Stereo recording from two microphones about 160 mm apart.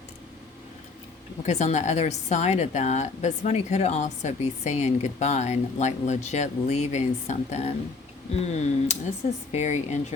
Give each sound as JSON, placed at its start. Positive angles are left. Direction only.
{"t": 1.5, "sound": "a woman's voice", "side_deg": 45}